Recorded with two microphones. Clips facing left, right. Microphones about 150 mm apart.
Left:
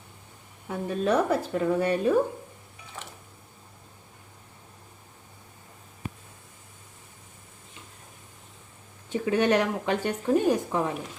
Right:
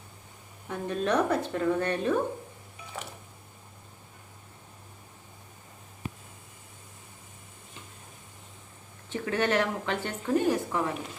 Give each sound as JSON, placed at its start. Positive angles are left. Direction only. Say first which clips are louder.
{"t": 0.7, "sound": "a woman's voice", "louder": "left 2 dB", "side_deg": 5}
{"t": 9.0, "sound": "a woman's voice", "louder": "left 5 dB", "side_deg": 15}